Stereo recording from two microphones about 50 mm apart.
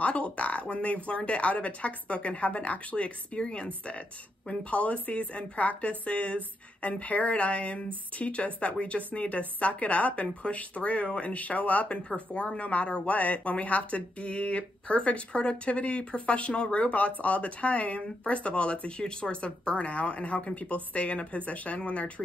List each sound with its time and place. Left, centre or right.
0.0 s speech: left